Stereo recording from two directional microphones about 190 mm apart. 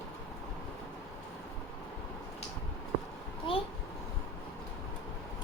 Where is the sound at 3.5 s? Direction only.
25° left (ahead or behind).